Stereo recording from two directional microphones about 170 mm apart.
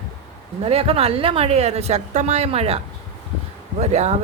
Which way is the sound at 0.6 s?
35° right (ahead or behind).